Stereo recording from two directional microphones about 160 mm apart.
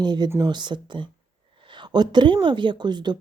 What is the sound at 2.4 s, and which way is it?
Speech, 30° right (ahead or behind).